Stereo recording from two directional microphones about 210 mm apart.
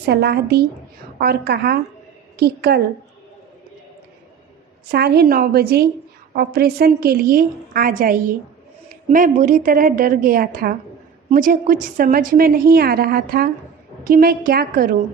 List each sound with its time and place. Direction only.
0.0 s a woman's voice: 50° right (ahead or behind)
4.9 s a woman's voice: 50° right (ahead or behind)